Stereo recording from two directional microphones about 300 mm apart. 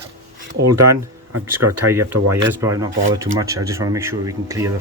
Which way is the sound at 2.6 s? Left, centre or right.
Centre.